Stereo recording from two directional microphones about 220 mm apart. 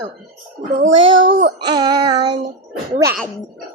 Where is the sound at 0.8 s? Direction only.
60° right (ahead or behind).